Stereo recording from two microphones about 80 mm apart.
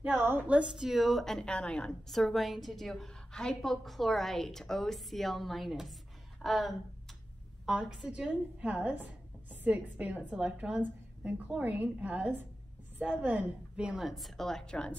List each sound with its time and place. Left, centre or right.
0.0 s a woman's voice: right
0.7 s a woman's voice: centre
8.1 s a woman's voice: centre